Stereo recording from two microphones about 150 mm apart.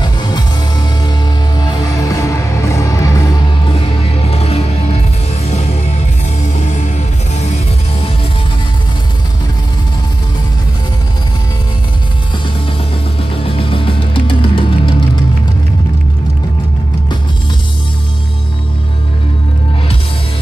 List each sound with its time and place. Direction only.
0.0 s music: 30° left (ahead or behind)
3.6 s music: 40° left (ahead or behind)
13.3 s music: 35° left (ahead or behind)